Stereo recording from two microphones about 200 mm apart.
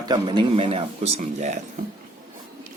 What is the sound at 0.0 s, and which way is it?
Speech, 20° right (ahead or behind).